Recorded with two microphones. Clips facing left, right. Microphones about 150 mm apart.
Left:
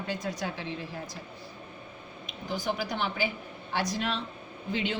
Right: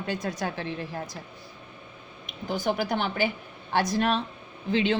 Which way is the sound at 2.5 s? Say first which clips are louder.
Right 5 dB; 55° right (ahead or behind).